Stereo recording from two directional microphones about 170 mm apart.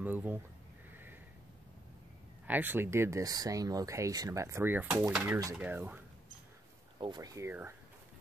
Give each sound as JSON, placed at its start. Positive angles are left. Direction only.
{"t": 0.0, "sound": "speech", "side_deg": -10}
{"t": 2.4, "sound": "speech", "side_deg": -10}
{"t": 5.1, "sound": "dishes", "side_deg": -5}
{"t": 5.6, "sound": "speech", "side_deg": -10}
{"t": 7.0, "sound": "speech", "side_deg": -25}